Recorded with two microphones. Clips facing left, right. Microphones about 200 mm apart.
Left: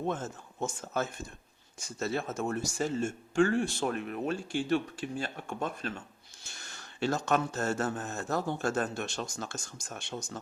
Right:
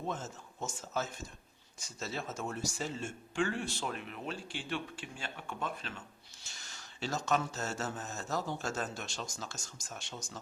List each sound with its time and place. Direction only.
0.1 s speech: 55° left (ahead or behind)
6.4 s speech: 55° left (ahead or behind)